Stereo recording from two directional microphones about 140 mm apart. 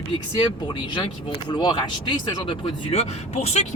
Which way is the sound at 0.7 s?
35° left (ahead or behind).